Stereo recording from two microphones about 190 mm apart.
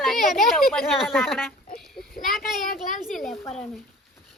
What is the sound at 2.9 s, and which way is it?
Speech, centre (ahead or behind).